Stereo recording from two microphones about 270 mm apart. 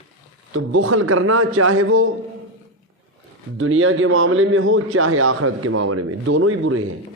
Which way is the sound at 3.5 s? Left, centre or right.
Right.